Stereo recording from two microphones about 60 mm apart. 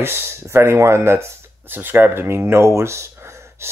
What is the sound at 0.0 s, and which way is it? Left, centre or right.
Speech, right.